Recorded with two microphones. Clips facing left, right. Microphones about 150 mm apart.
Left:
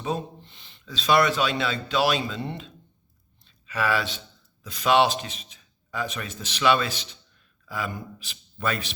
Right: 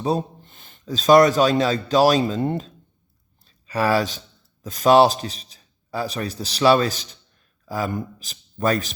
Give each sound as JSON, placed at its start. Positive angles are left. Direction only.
{"t": 0.0, "sound": "a man's voice", "side_deg": -40}
{"t": 3.4, "sound": "a sound", "side_deg": -35}
{"t": 4.6, "sound": "a man's voice", "side_deg": -45}